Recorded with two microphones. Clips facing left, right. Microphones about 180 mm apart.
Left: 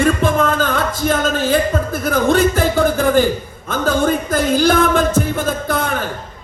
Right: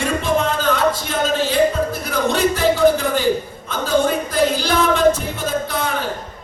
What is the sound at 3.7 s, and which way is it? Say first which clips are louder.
Music: left 2 dB; 50° left (ahead or behind).